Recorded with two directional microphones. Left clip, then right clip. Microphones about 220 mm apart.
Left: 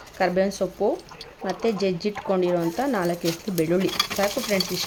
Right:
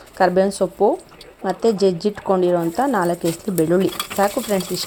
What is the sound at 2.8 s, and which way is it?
Speech, 5° right (ahead or behind).